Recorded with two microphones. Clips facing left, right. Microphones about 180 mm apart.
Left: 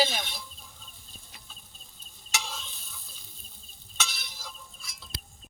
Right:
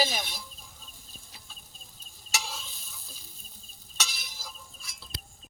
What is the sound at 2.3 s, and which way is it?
Stir, 5° right (ahead or behind).